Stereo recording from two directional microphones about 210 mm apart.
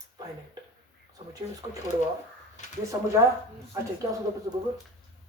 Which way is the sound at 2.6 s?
35° left (ahead or behind).